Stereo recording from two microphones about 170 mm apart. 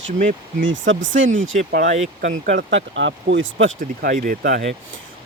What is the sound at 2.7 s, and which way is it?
Speech, 90° right.